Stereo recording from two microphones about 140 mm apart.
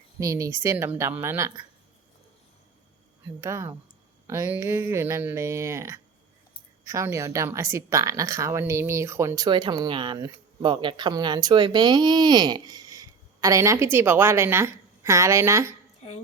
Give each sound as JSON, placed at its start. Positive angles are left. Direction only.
{"t": 0.2, "sound": "a woman's voice", "side_deg": -25}
{"t": 3.4, "sound": "a woman's voice", "side_deg": -20}